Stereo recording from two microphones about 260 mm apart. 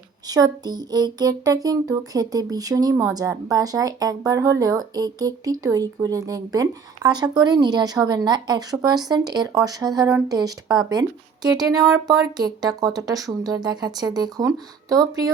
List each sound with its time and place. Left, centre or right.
0.3 s music: centre